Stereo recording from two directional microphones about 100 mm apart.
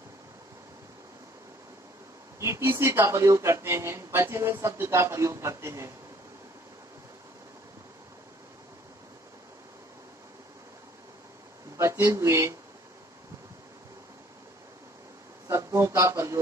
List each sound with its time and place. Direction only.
2.4 s speech: 30° right (ahead or behind)
11.7 s speech: 30° right (ahead or behind)
15.4 s a sound: 30° right (ahead or behind)